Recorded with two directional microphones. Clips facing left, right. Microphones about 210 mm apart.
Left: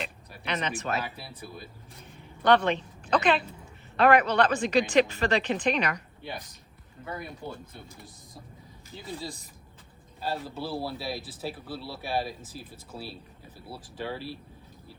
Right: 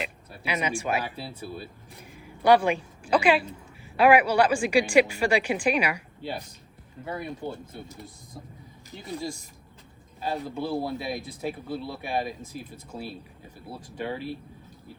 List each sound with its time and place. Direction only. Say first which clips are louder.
0.0 s a sound: right 3 dB; 10° right (ahead or behind)
1.0 s speech: right 4 dB; 30° right (ahead or behind)
2.0 s a woman's voice: right 3 dB; 10° right (ahead or behind)
7.0 s speech: right 4 dB; 30° right (ahead or behind)
8.9 s a woman's voice: right 3 dB; 15° right (ahead or behind)
10.2 s a woman's voice: right 3 dB; 15° right (ahead or behind)
13.9 s a woman's voice: right 3 dB; 15° right (ahead or behind)